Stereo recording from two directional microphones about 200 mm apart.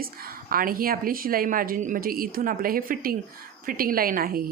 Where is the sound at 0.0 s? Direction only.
50° right (ahead or behind).